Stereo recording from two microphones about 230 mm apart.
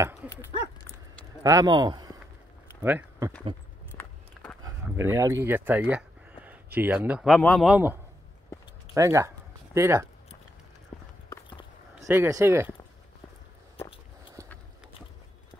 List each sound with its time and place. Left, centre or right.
0.0 s dog: centre
1.4 s speech: centre
3.9 s walk: centre
4.6 s speech: centre
10.9 s clip-clop: centre
12.0 s speech: centre